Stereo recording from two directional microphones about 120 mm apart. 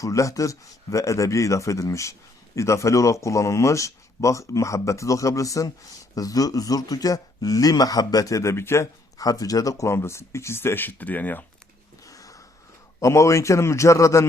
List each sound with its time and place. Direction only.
0.0 s speech: 25° left (ahead or behind)
12.0 s a sound: 30° left (ahead or behind)
13.0 s speech: 25° left (ahead or behind)